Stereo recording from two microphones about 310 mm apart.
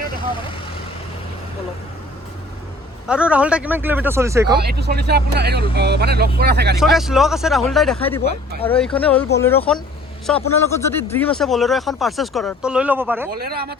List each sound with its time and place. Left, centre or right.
3.1 s speech: centre
4.6 s speech: right
6.7 s speech: centre
13.3 s speech: right